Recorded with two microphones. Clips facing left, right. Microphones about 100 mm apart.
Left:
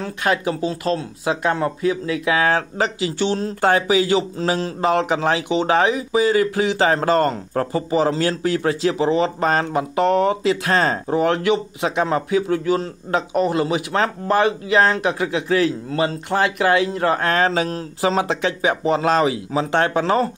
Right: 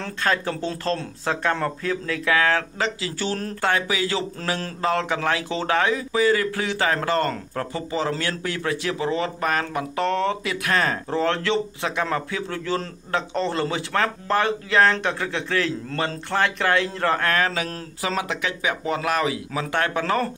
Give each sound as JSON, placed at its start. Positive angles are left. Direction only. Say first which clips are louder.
{"t": 0.0, "sound": "a man's voice", "louder": "left 3 dB", "side_deg": 15}